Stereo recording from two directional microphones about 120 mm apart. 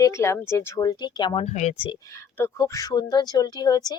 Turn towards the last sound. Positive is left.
turn(degrees=30)  # may be behind; listen again after turning